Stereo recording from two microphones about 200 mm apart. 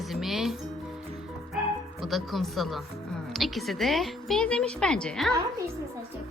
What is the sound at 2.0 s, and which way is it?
Speech, centre (ahead or behind).